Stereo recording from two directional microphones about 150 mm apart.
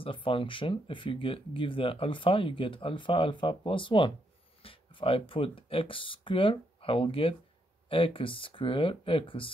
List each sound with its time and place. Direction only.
0.0 s speech: 35° left (ahead or behind)